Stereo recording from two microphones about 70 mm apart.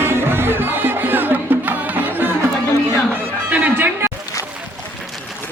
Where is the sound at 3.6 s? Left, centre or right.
Right.